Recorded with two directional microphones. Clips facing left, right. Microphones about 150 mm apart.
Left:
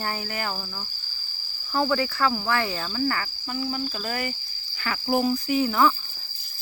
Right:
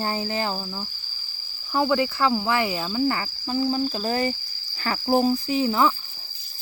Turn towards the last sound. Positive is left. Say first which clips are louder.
# even
turn(degrees=-20)  # may be behind; listen again after turning